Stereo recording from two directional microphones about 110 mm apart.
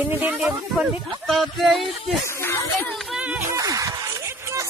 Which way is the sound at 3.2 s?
15° right (ahead or behind).